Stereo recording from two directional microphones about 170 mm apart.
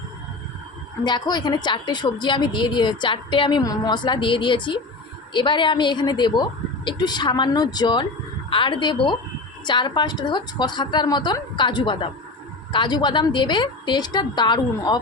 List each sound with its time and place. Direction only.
1.0 s a woman's voice: 25° left (ahead or behind)